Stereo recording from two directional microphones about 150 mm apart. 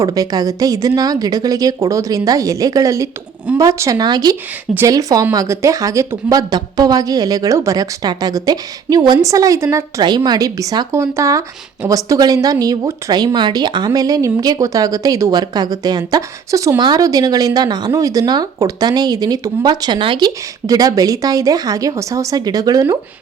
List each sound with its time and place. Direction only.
0.0 s speech: 25° right (ahead or behind)
10.0 s speech: 30° right (ahead or behind)